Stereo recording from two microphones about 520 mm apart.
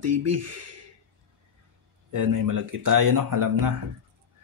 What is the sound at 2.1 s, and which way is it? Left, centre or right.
Speech, right.